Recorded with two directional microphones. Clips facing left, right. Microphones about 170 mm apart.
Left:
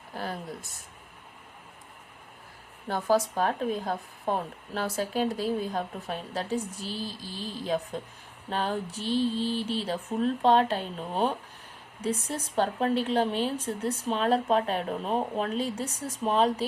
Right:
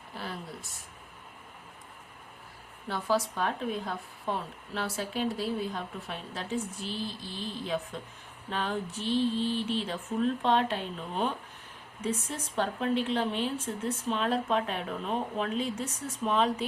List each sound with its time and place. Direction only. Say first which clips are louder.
0.1 s a sound: left 5 dB; 45° left (ahead or behind)
2.8 s speech: left 4 dB; 45° left (ahead or behind)
12.5 s speech: left 3 dB; 35° left (ahead or behind)